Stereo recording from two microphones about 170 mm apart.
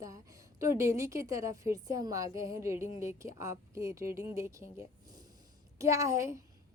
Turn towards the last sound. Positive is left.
turn(degrees=-15)  # may be behind; listen again after turning